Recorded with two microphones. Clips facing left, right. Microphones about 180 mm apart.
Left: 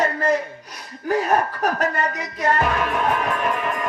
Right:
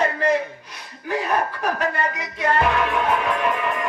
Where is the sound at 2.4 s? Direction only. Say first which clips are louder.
Right 1 dB; 40° left (ahead or behind).